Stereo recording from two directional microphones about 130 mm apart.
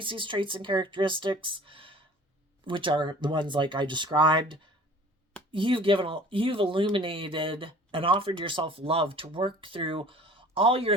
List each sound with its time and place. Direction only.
0.0 s speech: 40° right (ahead or behind)